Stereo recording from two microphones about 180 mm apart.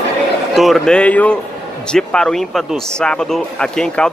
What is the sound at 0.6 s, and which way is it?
Speech, centre (ahead or behind).